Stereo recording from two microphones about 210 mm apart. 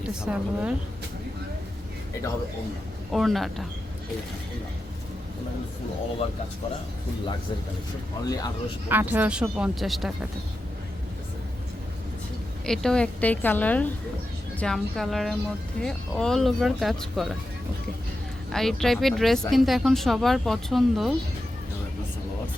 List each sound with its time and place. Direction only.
0.1 s speech: 5° right (ahead or behind)
3.1 s speech: centre (ahead or behind)
8.2 s speech: 20° left (ahead or behind)
8.9 s speech: 10° right (ahead or behind)
12.6 s a woman's voice: 5° left (ahead or behind)
18.5 s speech: centre (ahead or behind)